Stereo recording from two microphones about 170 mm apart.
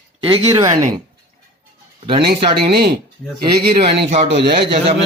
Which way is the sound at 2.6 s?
65° right (ahead or behind).